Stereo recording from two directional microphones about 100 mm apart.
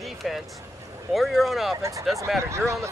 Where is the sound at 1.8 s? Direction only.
30° right (ahead or behind).